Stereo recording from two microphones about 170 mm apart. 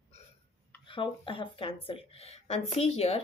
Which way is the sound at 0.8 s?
30° left (ahead or behind).